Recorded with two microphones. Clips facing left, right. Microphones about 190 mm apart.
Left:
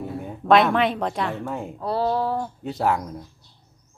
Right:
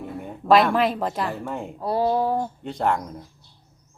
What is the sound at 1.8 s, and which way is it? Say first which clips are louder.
Speech: right 2 dB; 15° right (ahead or behind).